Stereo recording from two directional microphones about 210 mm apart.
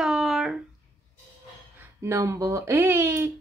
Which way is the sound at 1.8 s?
10° right (ahead or behind).